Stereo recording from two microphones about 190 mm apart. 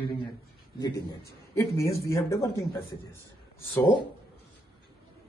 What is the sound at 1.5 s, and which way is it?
A man's voice, 15° left (ahead or behind).